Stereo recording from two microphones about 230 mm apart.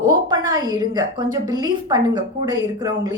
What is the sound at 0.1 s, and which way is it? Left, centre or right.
A woman's voice, centre.